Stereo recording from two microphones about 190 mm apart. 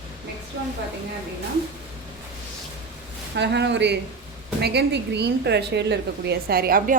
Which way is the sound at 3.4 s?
65° right (ahead or behind).